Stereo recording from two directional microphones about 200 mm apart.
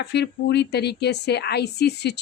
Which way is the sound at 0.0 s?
55° left (ahead or behind).